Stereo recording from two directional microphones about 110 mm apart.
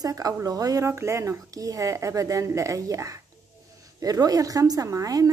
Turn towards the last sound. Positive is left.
turn(degrees=-30)  # may be behind; listen again after turning